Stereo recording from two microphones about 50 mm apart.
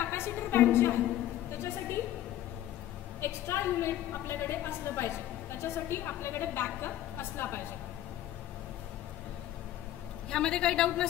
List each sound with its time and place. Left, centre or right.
0.0 s a woman's voice: left
1.5 s a sound: left
3.2 s a woman's voice: left
10.3 s a woman's voice: centre